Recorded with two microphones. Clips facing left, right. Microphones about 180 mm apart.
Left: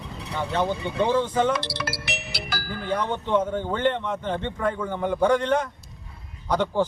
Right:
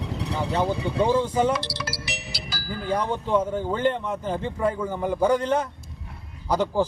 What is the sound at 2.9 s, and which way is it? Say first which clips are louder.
Speech: right 1 dB; 10° right (ahead or behind).